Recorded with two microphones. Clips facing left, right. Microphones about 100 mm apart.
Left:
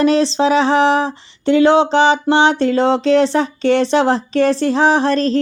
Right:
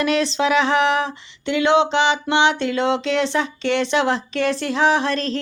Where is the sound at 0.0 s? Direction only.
30° left (ahead or behind).